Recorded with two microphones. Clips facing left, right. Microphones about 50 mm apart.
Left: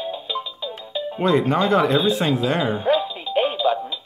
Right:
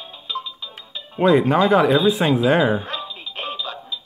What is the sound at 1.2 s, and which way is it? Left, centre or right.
Speech, centre.